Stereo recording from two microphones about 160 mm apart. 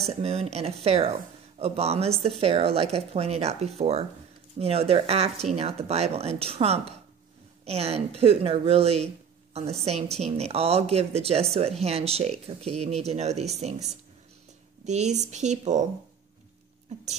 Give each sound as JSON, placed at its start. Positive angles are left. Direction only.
{"t": 0.0, "sound": "speech", "side_deg": -40}
{"t": 16.9, "sound": "speech", "side_deg": -45}